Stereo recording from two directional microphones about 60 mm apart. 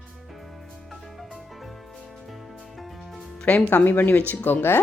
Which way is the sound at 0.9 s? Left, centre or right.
Centre.